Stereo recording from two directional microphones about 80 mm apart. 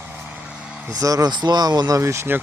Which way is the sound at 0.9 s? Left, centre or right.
Right.